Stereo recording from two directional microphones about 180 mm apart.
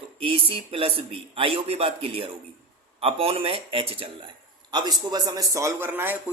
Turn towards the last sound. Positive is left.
turn(degrees=-10)  # may be behind; listen again after turning